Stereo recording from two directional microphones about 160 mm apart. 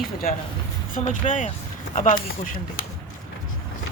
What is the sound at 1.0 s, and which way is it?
Speech, 50° left (ahead or behind).